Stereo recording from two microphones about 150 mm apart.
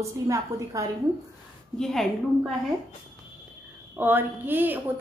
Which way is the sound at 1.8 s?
Centre (ahead or behind).